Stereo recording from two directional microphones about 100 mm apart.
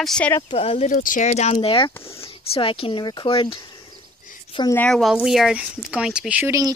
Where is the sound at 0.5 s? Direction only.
75° left (ahead or behind).